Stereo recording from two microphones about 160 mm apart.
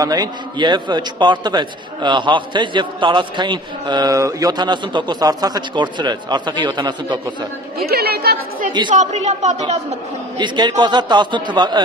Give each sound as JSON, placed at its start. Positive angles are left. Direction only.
{"t": 0.0, "sound": "a man's voice", "side_deg": -25}
{"t": 7.8, "sound": "a woman's voice", "side_deg": -80}
{"t": 8.9, "sound": "a woman's voice", "side_deg": -45}
{"t": 10.3, "sound": "a man's voice", "side_deg": -25}